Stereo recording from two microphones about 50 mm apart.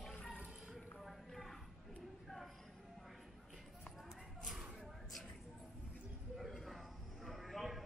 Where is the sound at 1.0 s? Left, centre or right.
Centre.